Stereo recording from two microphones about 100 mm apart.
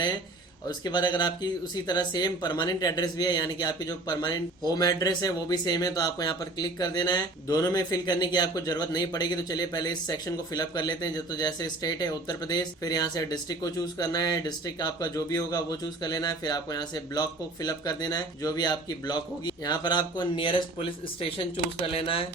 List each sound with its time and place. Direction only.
0.7 s speech: 45° left (ahead or behind); by 22.3 s 65° left (ahead or behind)